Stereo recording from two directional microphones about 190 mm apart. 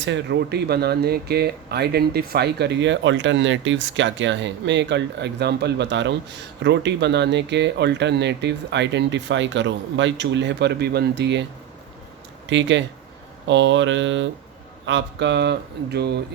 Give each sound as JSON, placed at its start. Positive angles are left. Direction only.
{"t": 0.0, "sound": "speech", "side_deg": -70}
{"t": 12.5, "sound": "speech", "side_deg": -70}